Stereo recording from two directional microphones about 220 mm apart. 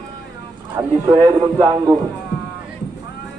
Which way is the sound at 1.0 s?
15° right (ahead or behind).